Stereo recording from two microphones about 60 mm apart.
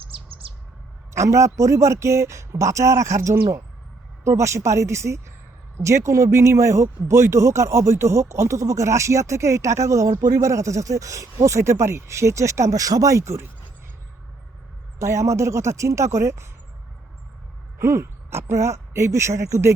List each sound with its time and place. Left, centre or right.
1.1 s speech: right
4.2 s speech: right
14.9 s speech: right
17.7 s speech: right